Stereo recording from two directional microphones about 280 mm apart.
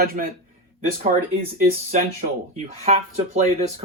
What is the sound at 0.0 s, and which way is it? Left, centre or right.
Speech, right.